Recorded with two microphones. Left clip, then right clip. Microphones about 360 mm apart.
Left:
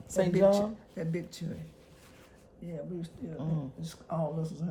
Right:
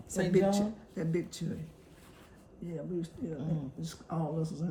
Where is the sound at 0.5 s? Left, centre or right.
Centre.